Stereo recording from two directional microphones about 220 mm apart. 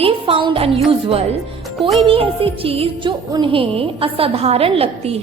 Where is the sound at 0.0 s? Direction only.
25° right (ahead or behind).